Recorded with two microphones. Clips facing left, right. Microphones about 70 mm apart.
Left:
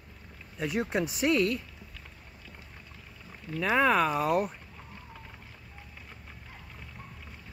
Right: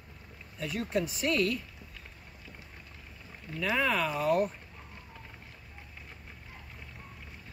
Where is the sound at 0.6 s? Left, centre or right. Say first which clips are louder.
Left 2 dB; left.